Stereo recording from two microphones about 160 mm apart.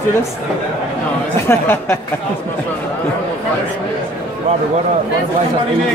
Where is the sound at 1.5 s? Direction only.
15° left (ahead or behind).